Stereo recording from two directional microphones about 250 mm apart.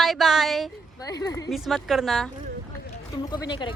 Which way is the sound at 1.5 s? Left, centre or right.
Centre.